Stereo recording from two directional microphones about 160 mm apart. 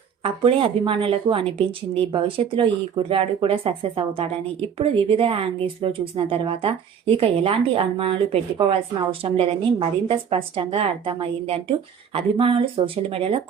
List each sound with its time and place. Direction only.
0.2 s a woman's voice: 35° right (ahead or behind)